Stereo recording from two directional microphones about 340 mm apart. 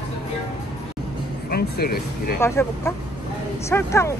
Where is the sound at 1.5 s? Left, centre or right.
Left.